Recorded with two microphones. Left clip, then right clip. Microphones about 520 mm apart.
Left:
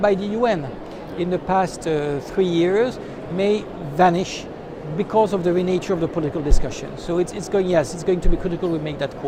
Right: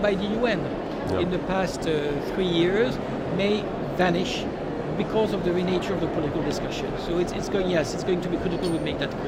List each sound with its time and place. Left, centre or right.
0.0 s speech: left
7.5 s speech: left